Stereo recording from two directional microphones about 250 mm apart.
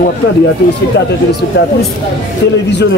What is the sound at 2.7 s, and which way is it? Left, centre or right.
Speech, left.